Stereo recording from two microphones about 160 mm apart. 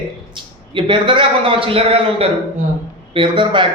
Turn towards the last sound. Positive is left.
turn(degrees=-30)  # may be behind; listen again after turning